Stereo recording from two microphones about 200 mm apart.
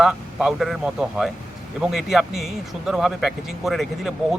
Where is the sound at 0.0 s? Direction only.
5° right (ahead or behind).